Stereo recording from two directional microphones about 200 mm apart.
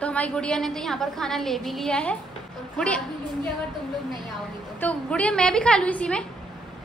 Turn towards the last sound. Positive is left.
turn(degrees=5)  # may be behind; listen again after turning